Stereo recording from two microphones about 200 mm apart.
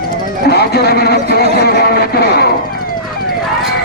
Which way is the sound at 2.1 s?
50° left (ahead or behind).